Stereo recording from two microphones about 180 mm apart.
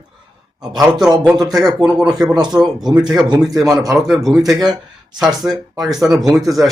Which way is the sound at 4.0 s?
Centre (ahead or behind).